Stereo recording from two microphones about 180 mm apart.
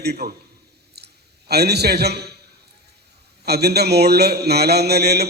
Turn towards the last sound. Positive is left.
turn(degrees=-65)  # may be behind; listen again after turning